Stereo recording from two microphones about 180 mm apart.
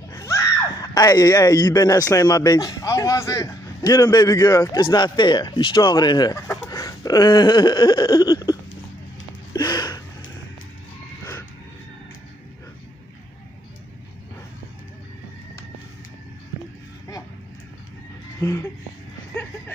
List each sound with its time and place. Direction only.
0.1 s speech: 20° left (ahead or behind)
9.5 s a sound: 20° left (ahead or behind)
18.4 s speech: 20° left (ahead or behind)